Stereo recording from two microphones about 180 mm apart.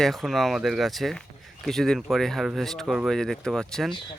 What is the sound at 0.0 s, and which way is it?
Speech, centre (ahead or behind).